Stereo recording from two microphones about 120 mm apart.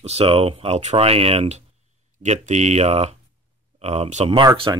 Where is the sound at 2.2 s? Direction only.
80° right; by 4.5 s 50° right (ahead or behind).